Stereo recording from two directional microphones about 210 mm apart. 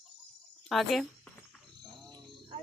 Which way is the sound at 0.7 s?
Centre (ahead or behind).